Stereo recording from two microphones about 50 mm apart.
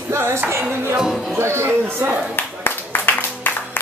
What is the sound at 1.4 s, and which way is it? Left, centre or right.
Speech, right.